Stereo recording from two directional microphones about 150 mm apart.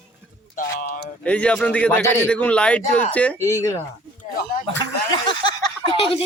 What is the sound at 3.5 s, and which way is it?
Speech, 20° left (ahead or behind).